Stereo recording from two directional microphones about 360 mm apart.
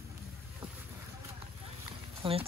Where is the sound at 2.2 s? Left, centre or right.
Centre.